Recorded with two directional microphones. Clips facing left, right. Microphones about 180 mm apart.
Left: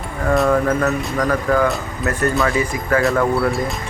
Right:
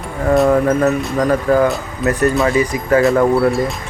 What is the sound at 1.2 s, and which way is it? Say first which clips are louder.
Speech: right 4 dB; 20° right (ahead or behind).